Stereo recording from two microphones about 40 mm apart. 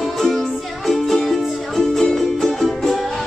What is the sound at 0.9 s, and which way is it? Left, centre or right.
Music, centre.